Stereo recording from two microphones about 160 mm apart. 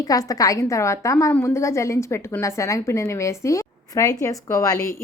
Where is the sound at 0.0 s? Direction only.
20° left (ahead or behind).